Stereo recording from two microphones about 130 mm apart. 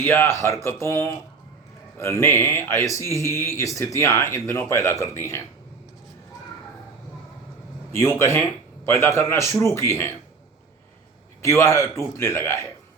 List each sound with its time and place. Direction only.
0.0 s a man's voice: 20° left (ahead or behind)
7.9 s a man's voice: 20° left (ahead or behind)
11.4 s a man's voice: 20° left (ahead or behind)